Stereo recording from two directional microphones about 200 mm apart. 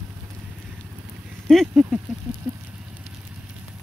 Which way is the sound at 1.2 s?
Centre (ahead or behind).